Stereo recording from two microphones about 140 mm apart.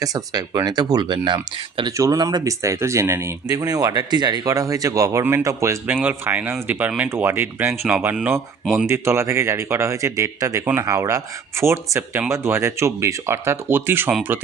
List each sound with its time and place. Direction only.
0.0 s speech: 25° right (ahead or behind); by 8.9 s centre (ahead or behind)
8.9 s speech: 20° right (ahead or behind)